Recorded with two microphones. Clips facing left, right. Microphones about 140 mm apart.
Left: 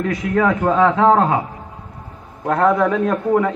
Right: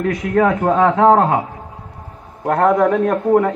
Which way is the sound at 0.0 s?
50° right (ahead or behind).